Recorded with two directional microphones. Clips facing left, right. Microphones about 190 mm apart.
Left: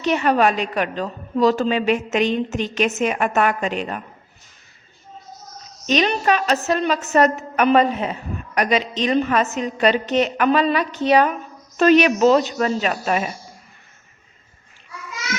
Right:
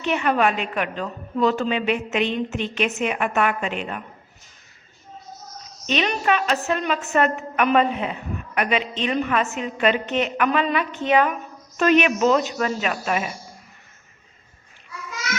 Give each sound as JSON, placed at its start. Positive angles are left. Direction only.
{"t": 0.0, "sound": "a woman's voice", "side_deg": 35}
{"t": 5.8, "sound": "a woman's voice", "side_deg": 40}